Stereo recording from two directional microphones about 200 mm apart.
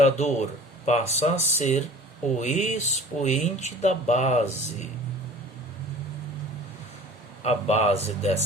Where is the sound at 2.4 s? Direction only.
35° left (ahead or behind).